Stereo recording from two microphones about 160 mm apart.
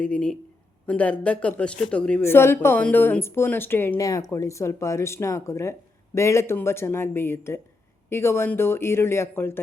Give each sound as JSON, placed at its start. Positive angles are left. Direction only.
{"t": 0.0, "sound": "speech", "side_deg": 5}